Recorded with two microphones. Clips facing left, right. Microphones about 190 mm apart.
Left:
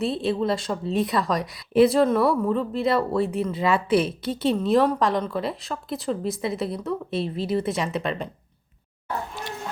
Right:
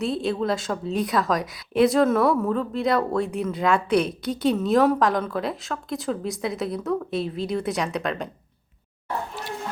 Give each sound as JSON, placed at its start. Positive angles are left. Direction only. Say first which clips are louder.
{"t": 0.0, "sound": "speech", "louder": "left 1 dB", "side_deg": 0}